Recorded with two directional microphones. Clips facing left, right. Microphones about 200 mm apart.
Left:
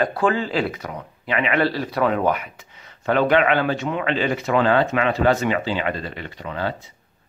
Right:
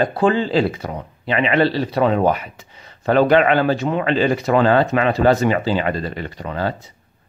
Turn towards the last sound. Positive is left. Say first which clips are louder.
# right 4 dB
turn(degrees=-40)  # may be behind; listen again after turning